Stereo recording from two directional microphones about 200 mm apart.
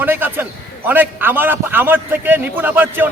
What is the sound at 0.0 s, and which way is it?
Speech, 10° right (ahead or behind).